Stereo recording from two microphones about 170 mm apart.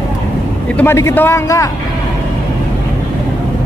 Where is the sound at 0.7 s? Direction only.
15° left (ahead or behind).